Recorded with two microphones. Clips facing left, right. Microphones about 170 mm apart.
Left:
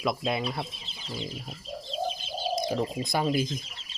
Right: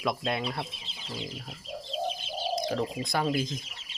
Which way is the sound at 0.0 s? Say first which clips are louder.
Left 2 dB; 5° left (ahead or behind).